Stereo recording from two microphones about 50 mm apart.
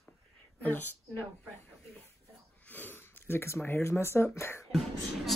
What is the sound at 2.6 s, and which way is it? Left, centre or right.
Sniff, left.